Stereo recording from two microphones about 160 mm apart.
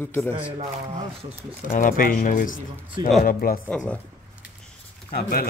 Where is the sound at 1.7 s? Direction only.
60° left (ahead or behind).